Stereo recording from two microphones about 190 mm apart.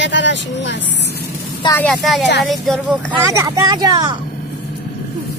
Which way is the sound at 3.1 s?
15° right (ahead or behind).